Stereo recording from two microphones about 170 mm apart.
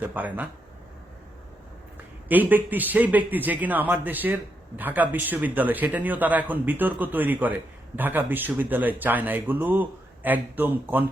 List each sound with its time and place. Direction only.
0.0 s speech: 10° right (ahead or behind)
2.3 s speech: 10° right (ahead or behind)